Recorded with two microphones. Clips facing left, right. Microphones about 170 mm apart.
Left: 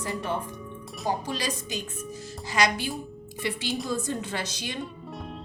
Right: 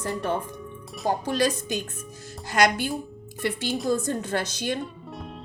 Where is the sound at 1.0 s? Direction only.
55° right (ahead or behind).